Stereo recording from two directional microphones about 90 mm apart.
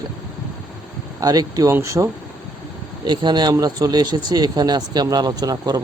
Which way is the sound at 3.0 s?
55° right (ahead or behind).